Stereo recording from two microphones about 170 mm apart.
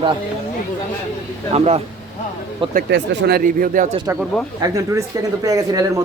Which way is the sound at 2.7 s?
70° right (ahead or behind).